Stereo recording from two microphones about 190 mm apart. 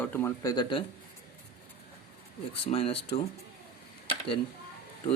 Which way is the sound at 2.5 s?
30° left (ahead or behind).